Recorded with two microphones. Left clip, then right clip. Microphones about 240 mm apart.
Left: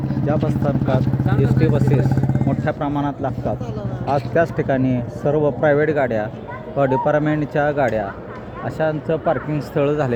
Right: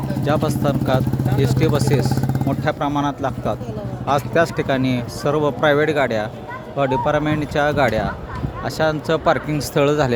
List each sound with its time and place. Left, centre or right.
0.3 s a man's voice: centre